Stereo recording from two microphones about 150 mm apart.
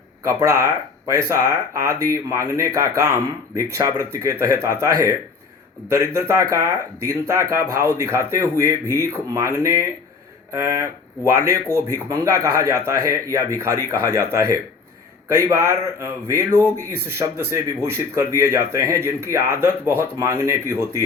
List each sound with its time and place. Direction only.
0.3 s a man's voice: 20° right (ahead or behind)
6.1 s a man's voice: 20° right (ahead or behind)
11.3 s a man's voice: 20° right (ahead or behind)